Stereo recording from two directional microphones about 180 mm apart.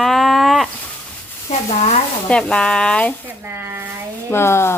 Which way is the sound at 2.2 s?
5° left (ahead or behind).